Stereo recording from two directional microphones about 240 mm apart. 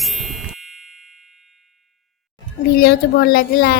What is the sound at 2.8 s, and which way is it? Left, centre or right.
Speech, left.